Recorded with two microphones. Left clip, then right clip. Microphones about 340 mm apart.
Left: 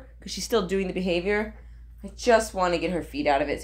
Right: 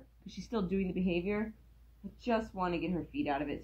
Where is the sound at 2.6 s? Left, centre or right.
Left.